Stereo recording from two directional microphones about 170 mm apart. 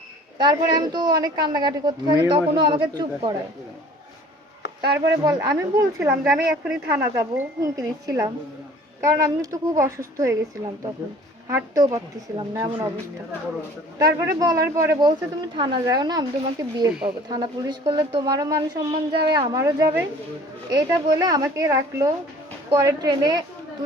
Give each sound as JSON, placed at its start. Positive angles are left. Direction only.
{"t": 0.3, "sound": "a woman's voice", "side_deg": -25}
{"t": 4.9, "sound": "a woman's voice", "side_deg": -15}
{"t": 6.2, "sound": "a woman's voice", "side_deg": -5}
{"t": 6.9, "sound": "a woman's voice", "side_deg": -15}
{"t": 11.4, "sound": "a woman's voice", "side_deg": -20}
{"t": 14.0, "sound": "a woman's voice", "side_deg": -20}